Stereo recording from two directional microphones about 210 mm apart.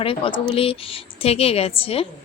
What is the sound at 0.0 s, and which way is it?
Speech, 25° left (ahead or behind).